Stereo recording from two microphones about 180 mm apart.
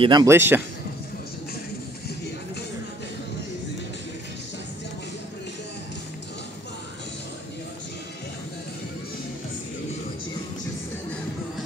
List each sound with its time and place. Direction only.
0.0 s speech: 20° right (ahead or behind)